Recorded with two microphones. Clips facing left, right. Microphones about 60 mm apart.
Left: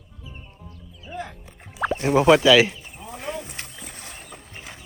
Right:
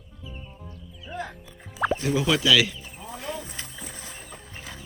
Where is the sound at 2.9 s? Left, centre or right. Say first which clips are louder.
Left 2 dB; left.